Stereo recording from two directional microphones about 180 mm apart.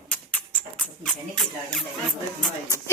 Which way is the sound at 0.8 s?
Centre (ahead or behind).